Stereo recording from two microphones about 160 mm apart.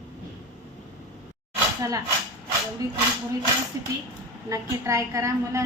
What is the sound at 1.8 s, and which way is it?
Speech, 20° right (ahead or behind).